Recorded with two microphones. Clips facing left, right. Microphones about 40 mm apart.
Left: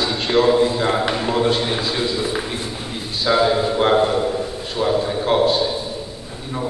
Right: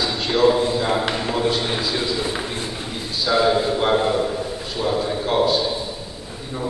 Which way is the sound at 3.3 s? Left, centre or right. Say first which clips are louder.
Left 2 dB; left.